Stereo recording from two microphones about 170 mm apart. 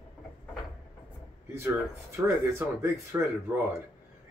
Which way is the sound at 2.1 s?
15° right (ahead or behind).